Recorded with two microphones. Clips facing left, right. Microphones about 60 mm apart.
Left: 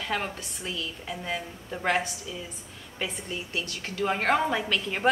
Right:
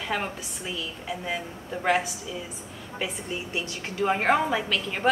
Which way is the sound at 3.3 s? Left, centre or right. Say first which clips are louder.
Right 2 dB; centre.